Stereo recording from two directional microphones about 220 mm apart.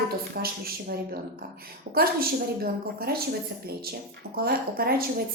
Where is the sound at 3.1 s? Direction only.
45° right (ahead or behind).